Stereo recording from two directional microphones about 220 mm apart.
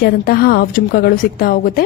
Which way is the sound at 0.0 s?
45° left (ahead or behind).